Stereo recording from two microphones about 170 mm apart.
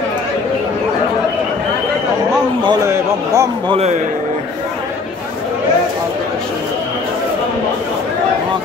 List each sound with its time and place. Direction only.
2.9 s a man's voice: 20° right (ahead or behind)
3.7 s a man's voice: 40° right (ahead or behind)